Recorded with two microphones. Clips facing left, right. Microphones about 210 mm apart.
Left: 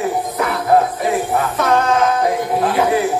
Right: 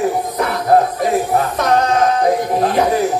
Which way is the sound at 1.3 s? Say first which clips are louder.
Right 1 dB; 40° right (ahead or behind).